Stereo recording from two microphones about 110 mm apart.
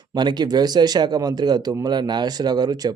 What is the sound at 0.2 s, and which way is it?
A man's voice, 40° right (ahead or behind).